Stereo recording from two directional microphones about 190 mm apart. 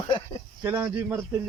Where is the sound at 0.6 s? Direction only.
10° right (ahead or behind).